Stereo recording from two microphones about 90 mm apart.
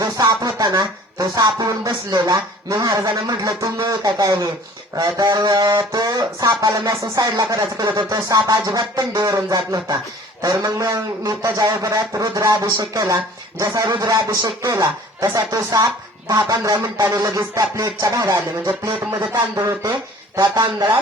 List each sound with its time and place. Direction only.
0.0 s speech: 45° right (ahead or behind)
20.6 s speech: 40° right (ahead or behind)